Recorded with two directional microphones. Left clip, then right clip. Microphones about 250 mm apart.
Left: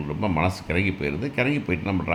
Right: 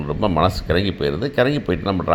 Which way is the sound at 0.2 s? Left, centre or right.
Centre.